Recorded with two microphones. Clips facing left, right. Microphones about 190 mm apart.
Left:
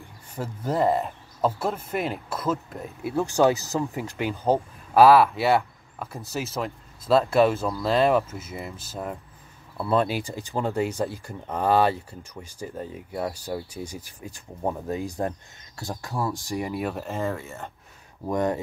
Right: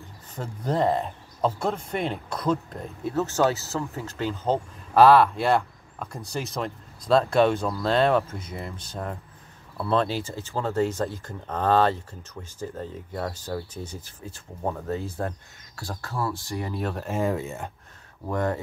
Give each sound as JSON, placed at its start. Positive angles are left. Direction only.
{"t": 0.3, "sound": "speech", "side_deg": 5}
{"t": 17.1, "sound": "speech", "side_deg": -15}
{"t": 18.2, "sound": "speech", "side_deg": 15}